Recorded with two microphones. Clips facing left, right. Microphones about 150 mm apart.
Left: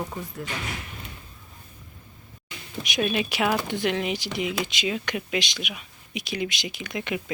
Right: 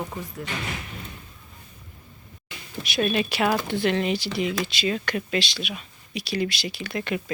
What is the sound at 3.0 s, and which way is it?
Speech, 10° left (ahead or behind).